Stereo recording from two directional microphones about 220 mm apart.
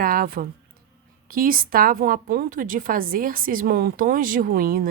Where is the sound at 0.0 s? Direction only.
40° right (ahead or behind).